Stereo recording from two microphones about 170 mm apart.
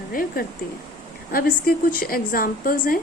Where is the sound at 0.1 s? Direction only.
55° left (ahead or behind).